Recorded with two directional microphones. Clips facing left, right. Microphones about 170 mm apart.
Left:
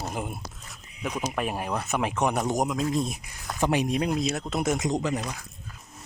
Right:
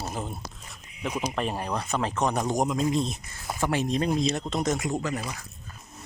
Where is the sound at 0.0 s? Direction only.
10° left (ahead or behind).